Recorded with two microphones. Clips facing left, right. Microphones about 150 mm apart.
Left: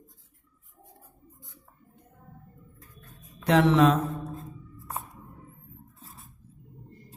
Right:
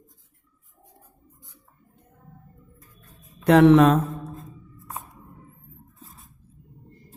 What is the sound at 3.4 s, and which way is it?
Mantra, 55° right (ahead or behind).